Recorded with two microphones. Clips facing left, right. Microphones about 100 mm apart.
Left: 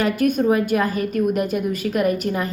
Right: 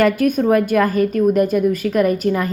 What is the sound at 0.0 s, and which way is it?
A woman's voice, 40° right (ahead or behind).